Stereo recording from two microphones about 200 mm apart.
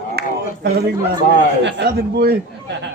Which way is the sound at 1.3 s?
55° right (ahead or behind).